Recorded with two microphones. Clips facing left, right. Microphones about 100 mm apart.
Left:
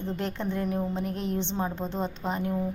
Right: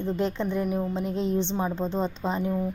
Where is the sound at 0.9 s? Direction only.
20° right (ahead or behind).